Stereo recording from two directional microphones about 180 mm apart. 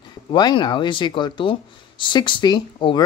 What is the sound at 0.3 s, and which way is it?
Speech, 25° left (ahead or behind).